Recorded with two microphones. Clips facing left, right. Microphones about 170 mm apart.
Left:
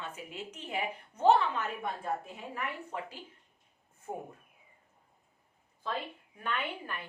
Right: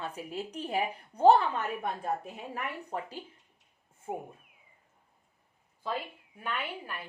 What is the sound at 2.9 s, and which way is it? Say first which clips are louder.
Speech: right 3 dB; 35° right (ahead or behind).